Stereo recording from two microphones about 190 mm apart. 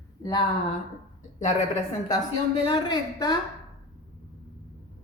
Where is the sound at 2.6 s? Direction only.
25° left (ahead or behind).